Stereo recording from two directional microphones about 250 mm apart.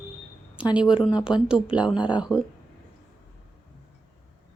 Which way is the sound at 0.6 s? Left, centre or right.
Centre.